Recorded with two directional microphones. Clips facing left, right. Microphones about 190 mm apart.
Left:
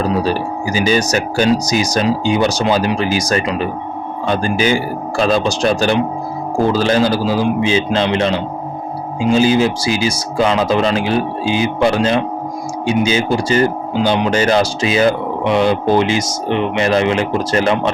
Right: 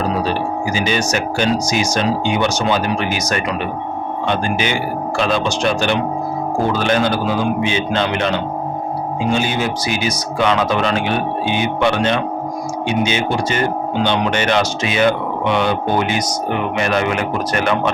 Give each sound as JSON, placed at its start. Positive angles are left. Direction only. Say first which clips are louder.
{"t": 0.2, "sound": "speech", "louder": "left 2 dB", "side_deg": 40}
{"t": 9.6, "sound": "speech", "louder": "left 5 dB", "side_deg": 30}